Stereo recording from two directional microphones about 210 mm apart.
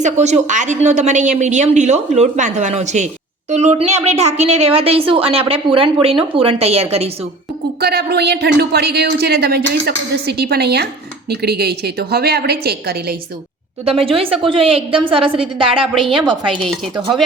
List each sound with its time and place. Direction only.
0.0 s a woman's voice: 35° right (ahead or behind)
7.8 s a woman's voice: 50° right (ahead or behind)
13.8 s a woman's voice: 25° right (ahead or behind)